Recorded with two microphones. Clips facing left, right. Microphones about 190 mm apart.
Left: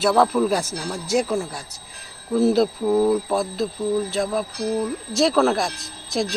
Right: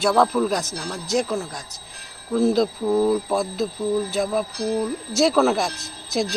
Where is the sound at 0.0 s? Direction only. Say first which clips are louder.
Left 1 dB; 5° left (ahead or behind).